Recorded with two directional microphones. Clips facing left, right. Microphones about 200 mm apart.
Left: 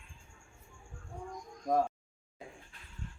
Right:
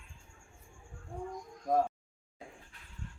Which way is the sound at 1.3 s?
5° right (ahead or behind).